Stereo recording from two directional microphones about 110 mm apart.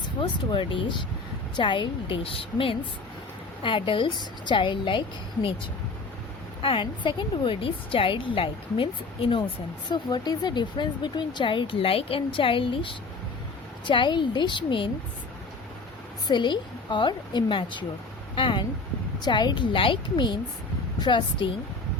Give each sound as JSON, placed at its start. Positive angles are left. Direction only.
{"t": 0.0, "sound": "speech", "side_deg": 45}
{"t": 6.6, "sound": "speech", "side_deg": 50}
{"t": 9.9, "sound": "speech", "side_deg": 40}
{"t": 16.2, "sound": "speech", "side_deg": 45}